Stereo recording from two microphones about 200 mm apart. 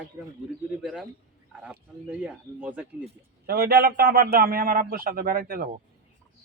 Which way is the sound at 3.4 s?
50° right (ahead or behind).